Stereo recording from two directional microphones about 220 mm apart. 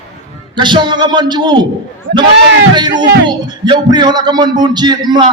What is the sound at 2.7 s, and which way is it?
Music, 20° right (ahead or behind).